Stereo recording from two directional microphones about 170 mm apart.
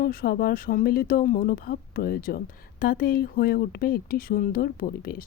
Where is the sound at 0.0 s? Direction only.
60° left (ahead or behind).